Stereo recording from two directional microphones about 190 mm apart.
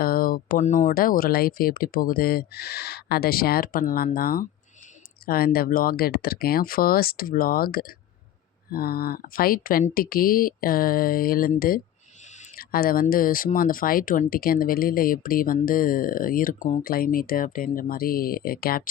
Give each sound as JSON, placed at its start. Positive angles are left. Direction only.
{"t": 0.0, "sound": "speech", "side_deg": 50}